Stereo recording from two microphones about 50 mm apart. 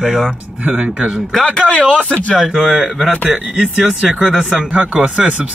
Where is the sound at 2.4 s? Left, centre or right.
Centre.